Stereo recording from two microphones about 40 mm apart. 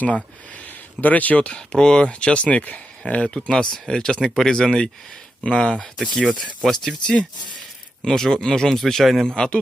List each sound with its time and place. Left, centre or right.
0.5 s speech: left
1.5 s speech: left
3.1 s speech: left; by 9.2 s centre
9.2 s speech: centre